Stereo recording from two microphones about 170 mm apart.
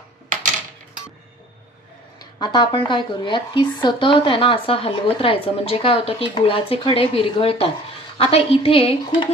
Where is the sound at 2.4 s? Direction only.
30° left (ahead or behind).